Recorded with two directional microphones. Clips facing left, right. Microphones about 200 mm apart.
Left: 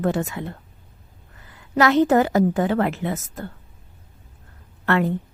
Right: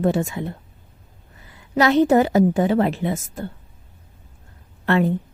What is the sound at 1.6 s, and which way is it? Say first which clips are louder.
A woman's voice: right 1 dB; 15° right (ahead or behind).